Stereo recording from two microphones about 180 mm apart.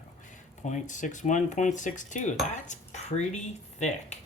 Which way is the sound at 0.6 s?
45° left (ahead or behind).